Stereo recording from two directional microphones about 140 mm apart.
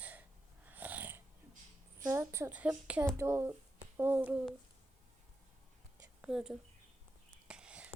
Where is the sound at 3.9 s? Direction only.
15° right (ahead or behind).